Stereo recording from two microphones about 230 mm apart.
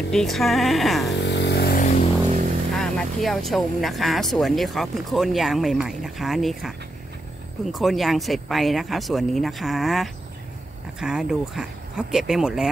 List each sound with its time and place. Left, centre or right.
0.1 s speech: centre
1.1 s vehicle: left
2.3 s vehicle: right
2.7 s speech: centre
7.7 s speech: centre